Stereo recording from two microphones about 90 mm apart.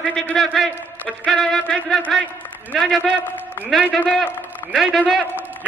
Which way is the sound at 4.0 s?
15° left (ahead or behind).